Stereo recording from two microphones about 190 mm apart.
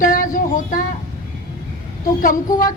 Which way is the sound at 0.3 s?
45° left (ahead or behind).